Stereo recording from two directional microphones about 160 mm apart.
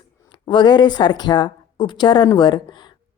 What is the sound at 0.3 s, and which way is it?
Speech, 30° left (ahead or behind).